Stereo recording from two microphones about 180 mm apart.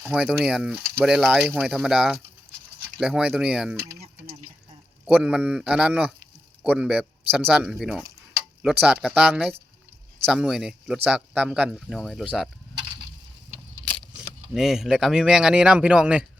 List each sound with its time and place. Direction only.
0.0 s speech: 5° right (ahead or behind)
4.0 s a sound: 35° right (ahead or behind)
5.0 s speech: 5° right (ahead or behind)
13.9 s speech: centre (ahead or behind)